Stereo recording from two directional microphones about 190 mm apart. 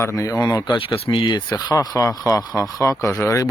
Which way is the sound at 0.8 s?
30° left (ahead or behind).